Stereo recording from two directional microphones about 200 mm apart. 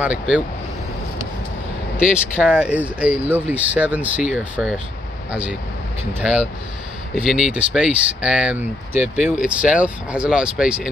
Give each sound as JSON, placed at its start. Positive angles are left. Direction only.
{"t": 0.0, "sound": "speech", "side_deg": -5}
{"t": 2.0, "sound": "speech", "side_deg": -5}